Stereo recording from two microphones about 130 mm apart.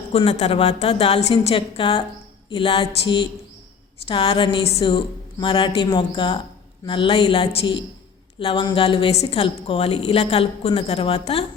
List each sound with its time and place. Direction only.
0.2 s a woman's voice: 50° left (ahead or behind)